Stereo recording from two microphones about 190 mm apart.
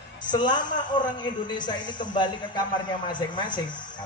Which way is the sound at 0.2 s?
25° left (ahead or behind).